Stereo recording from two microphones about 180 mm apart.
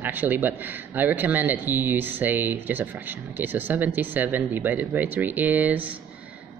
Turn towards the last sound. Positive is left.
turn(degrees=-10)  # may be behind; listen again after turning